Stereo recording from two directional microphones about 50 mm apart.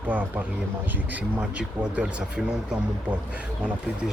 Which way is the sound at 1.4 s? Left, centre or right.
Centre.